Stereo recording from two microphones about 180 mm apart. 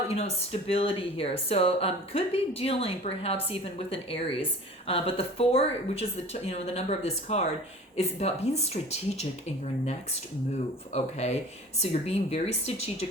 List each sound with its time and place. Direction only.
0.1 s speech: 35° left (ahead or behind)
10.9 s speech: 35° left (ahead or behind)